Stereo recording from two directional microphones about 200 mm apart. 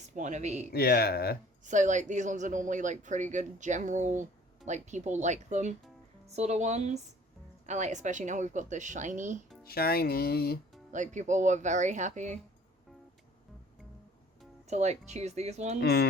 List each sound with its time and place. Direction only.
0.2 s speech: 35° right (ahead or behind)
0.7 s speech: 50° left (ahead or behind)
1.6 s speech: 40° right (ahead or behind)
9.6 s speech: 50° left (ahead or behind)
10.9 s speech: 35° right (ahead or behind)
14.7 s speech: 35° right (ahead or behind)
15.8 s speech: 55° left (ahead or behind)